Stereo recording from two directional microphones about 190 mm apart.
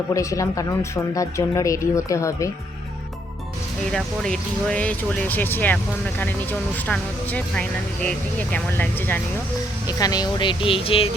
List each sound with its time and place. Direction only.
0.1 s speech: 15° left (ahead or behind)
3.9 s speech: 5° left (ahead or behind); by 11.1 s 30° left (ahead or behind)